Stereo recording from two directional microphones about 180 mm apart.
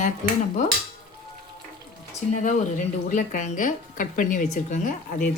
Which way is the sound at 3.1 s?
45° left (ahead or behind).